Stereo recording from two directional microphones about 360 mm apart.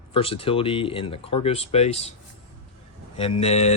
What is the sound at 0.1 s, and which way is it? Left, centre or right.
Speech, centre.